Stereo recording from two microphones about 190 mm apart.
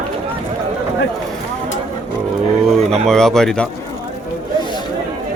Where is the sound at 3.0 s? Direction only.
Centre (ahead or behind).